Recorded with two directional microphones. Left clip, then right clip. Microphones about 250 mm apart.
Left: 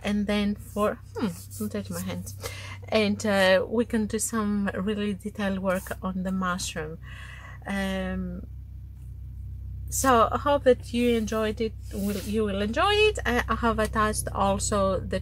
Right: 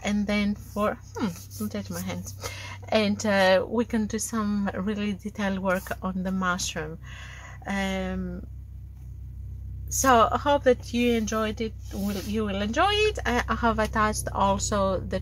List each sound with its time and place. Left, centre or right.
0.0 s a woman's voice: centre
9.9 s a woman's voice: centre